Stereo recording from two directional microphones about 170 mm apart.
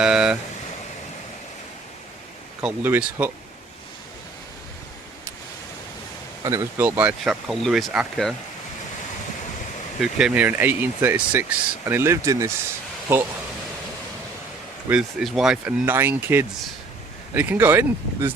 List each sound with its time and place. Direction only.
0.0 s vehicle: 5° right (ahead or behind)
2.6 s speech: 10° right (ahead or behind)
6.4 s speech: 20° right (ahead or behind); by 8.3 s centre (ahead or behind)
10.0 s speech: 5° right (ahead or behind)
14.8 s speech: 5° right (ahead or behind)